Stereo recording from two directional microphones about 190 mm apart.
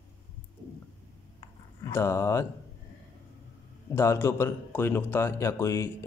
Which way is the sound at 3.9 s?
15° left (ahead or behind).